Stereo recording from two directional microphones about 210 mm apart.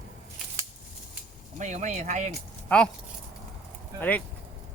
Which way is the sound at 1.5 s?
35° right (ahead or behind).